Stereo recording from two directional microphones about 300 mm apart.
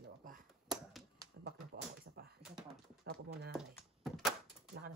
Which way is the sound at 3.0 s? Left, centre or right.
Right.